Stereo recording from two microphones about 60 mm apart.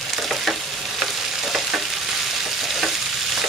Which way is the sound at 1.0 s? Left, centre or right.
Centre.